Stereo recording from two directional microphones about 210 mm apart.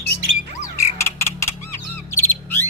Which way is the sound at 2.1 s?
10° left (ahead or behind).